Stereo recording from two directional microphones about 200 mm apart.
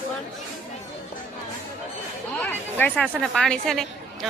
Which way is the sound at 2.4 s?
10° left (ahead or behind).